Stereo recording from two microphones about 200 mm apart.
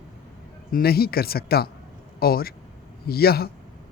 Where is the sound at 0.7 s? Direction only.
50° left (ahead or behind).